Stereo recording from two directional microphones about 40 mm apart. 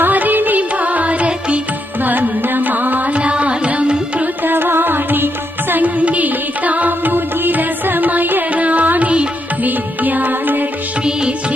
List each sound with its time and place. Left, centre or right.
0.0 s music: right
2.0 s carnatic music: right
3.2 s carnatic music: right
3.7 s music: right
4.4 s music: right
6.1 s music: right
11.0 s music: right